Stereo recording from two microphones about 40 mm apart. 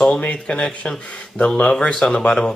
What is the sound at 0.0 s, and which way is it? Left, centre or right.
Speech, left.